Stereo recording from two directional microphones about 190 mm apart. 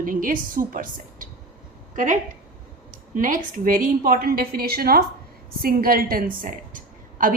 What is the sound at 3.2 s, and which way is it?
Speech, 45° right (ahead or behind).